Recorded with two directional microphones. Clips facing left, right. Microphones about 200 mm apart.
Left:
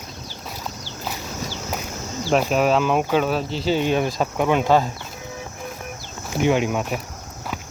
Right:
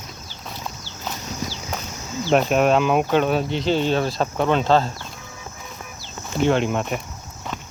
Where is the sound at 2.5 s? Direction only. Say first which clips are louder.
Right 1 dB; centre (ahead or behind).